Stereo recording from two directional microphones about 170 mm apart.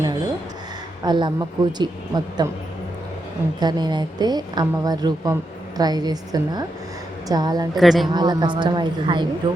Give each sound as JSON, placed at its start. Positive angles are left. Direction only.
{"t": 1.0, "sound": "speech", "side_deg": -25}
{"t": 3.6, "sound": "speech", "side_deg": -25}
{"t": 7.8, "sound": "speech", "side_deg": 0}
{"t": 8.1, "sound": "speech", "side_deg": -25}